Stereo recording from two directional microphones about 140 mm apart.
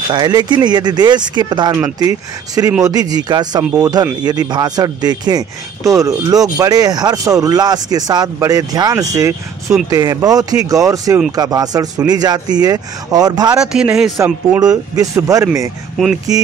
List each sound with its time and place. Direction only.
0.1 s speech: 30° right (ahead or behind)
13.6 s speech: 5° right (ahead or behind)
14.1 s speech: 20° right (ahead or behind)